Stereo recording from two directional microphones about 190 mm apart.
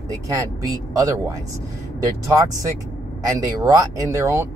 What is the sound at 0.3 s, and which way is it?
Speech, 20° right (ahead or behind).